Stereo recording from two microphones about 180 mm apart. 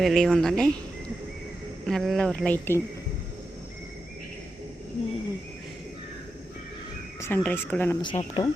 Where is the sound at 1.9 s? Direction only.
Centre (ahead or behind).